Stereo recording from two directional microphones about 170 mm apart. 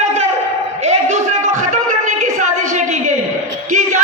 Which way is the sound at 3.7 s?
50° right (ahead or behind).